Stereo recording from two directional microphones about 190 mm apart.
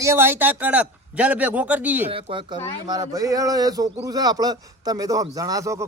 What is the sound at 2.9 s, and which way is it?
A man's voice, 20° right (ahead or behind).